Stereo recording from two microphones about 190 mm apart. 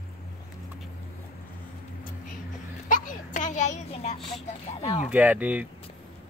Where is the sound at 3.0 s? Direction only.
40° left (ahead or behind).